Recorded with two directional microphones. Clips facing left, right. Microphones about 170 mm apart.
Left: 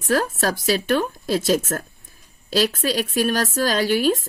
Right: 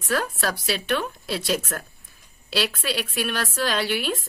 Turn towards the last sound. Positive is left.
turn(degrees=45)  # may be behind; listen again after turning